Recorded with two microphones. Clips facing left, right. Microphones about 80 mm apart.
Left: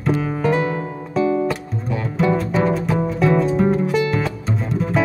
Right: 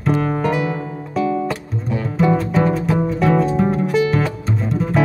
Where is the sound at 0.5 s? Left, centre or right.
Left.